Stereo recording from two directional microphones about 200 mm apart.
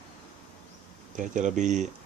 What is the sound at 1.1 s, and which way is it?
Speech, 40° right (ahead or behind).